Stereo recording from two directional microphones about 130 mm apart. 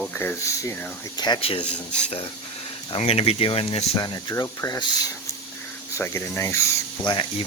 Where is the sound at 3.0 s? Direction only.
55° left (ahead or behind).